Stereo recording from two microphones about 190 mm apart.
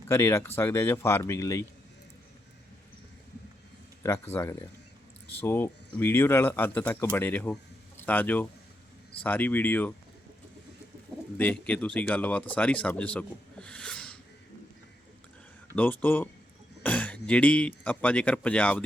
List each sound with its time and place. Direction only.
0.1 s speech: 15° left (ahead or behind)
4.0 s speech: 15° left (ahead or behind)
11.3 s speech: 5° left (ahead or behind)
15.7 s speech: 10° left (ahead or behind)